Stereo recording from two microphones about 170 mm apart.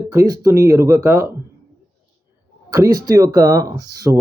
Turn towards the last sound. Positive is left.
turn(degrees=-20)  # may be behind; listen again after turning